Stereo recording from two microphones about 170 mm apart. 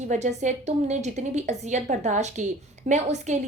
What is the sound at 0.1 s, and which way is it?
A woman's voice, 45° right (ahead or behind).